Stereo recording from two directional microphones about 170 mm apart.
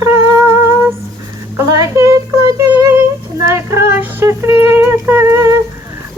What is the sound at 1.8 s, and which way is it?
Speech, 20° right (ahead or behind).